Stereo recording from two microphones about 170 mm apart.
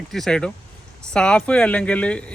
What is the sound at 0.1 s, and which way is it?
Speech, 5° left (ahead or behind).